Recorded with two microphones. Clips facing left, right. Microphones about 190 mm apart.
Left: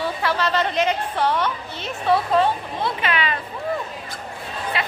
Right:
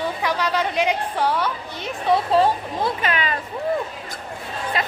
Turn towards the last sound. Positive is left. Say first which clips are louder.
# right 1 dB
turn(degrees=-45)  # may be behind; listen again after turning